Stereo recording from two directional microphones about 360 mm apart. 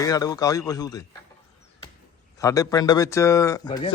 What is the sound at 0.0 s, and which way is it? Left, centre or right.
Speech, centre.